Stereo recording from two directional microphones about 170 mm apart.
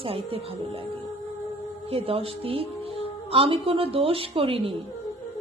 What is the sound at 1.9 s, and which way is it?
Speech, 35° right (ahead or behind).